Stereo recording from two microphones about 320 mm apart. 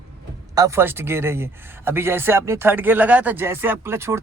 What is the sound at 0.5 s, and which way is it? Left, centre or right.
Speech, centre.